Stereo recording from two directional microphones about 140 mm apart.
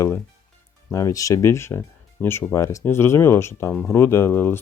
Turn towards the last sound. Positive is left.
turn(degrees=15)  # may be behind; listen again after turning